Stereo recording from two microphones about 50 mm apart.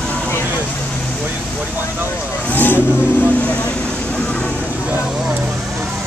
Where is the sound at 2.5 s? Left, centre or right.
Left.